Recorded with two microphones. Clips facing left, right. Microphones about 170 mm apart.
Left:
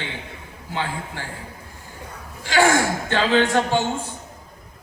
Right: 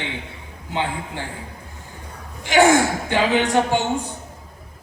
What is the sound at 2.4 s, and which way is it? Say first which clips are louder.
A man's voice: right 3 dB; 20° right (ahead or behind).